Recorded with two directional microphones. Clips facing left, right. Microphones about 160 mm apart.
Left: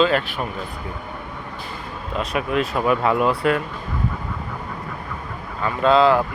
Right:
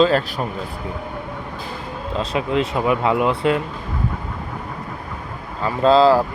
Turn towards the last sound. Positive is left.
turn(degrees=-35)  # may be behind; listen again after turning